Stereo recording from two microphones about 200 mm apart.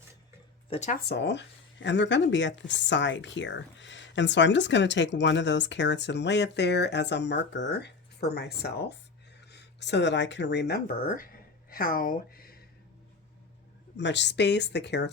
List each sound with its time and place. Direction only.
0.7 s speech: 35° left (ahead or behind)
1.0 s speech: 60° left (ahead or behind)
13.9 s speech: 60° left (ahead or behind)